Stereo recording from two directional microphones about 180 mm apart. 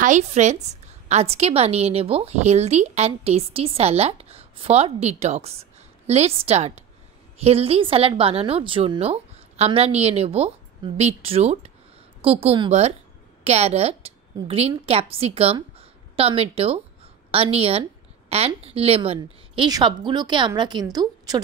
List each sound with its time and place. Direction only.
0.0 s a woman's voice: 40° right (ahead or behind); by 21.4 s 20° right (ahead or behind)